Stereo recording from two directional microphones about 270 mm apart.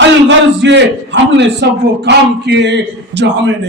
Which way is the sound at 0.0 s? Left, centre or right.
Right.